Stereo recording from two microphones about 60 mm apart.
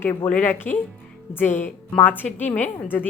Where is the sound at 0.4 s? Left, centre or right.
Left.